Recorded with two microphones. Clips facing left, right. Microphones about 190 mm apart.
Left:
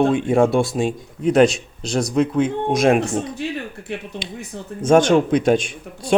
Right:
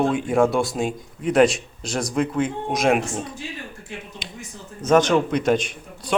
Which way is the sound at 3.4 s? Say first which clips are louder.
Left 9 dB; 65° left (ahead or behind).